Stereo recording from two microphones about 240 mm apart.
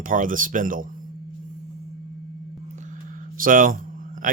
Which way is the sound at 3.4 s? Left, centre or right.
Right.